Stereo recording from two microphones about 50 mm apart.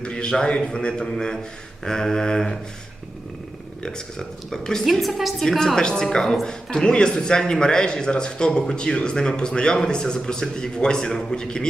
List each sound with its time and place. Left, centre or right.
0.0 s a woman's voice: centre
3.8 s a woman's voice: centre
4.9 s a woman's voice: centre